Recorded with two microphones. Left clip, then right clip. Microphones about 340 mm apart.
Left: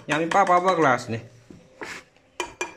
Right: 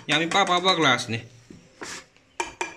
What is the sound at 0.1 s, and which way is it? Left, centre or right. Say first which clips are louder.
Speech: left 2 dB; centre.